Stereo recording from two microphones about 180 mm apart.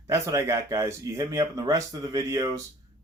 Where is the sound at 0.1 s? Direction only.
15° right (ahead or behind).